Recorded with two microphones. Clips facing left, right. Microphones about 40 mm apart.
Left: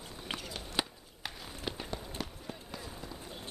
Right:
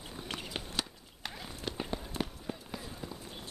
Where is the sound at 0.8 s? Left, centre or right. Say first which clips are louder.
Left 4 dB; centre.